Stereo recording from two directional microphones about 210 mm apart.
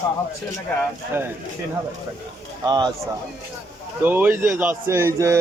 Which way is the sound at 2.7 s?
20° right (ahead or behind).